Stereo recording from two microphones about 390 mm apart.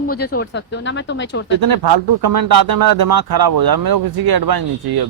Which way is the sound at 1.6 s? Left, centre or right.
Right.